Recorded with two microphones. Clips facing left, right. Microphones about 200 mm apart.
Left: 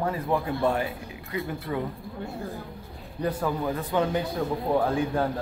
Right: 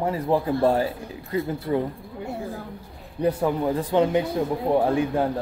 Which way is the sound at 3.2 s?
25° right (ahead or behind).